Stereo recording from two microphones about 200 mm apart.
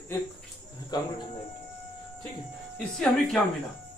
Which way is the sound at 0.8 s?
20° left (ahead or behind).